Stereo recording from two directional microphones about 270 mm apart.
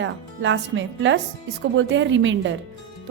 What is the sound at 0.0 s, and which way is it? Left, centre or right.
A woman's voice, right.